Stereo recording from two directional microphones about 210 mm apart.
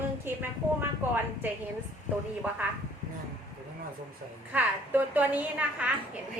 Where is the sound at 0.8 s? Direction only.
10° right (ahead or behind).